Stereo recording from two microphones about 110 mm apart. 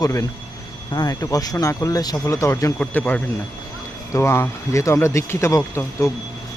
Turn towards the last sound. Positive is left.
turn(degrees=30)  # may be behind; listen again after turning